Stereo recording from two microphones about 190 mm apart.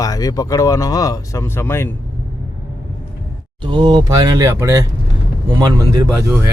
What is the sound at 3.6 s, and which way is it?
Speech, 25° right (ahead or behind).